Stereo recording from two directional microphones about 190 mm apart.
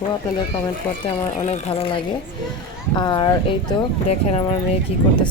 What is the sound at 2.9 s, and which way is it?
Speech, 25° left (ahead or behind).